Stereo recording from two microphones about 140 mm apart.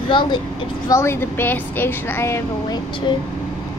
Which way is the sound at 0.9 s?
20° left (ahead or behind).